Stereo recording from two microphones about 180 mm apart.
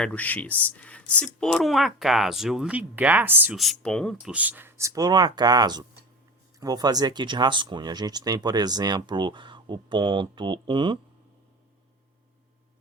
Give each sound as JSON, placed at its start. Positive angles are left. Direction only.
{"t": 0.0, "sound": "speech", "side_deg": 10}
{"t": 3.6, "sound": "speech", "side_deg": 0}